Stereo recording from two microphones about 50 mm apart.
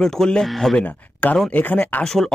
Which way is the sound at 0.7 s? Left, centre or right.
Left.